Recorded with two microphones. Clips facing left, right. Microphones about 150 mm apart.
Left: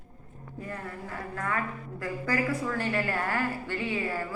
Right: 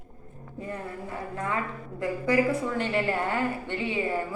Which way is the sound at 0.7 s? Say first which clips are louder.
Right 3 dB; 20° right (ahead or behind).